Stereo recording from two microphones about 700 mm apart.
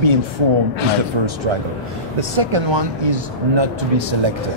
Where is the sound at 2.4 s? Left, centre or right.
Right.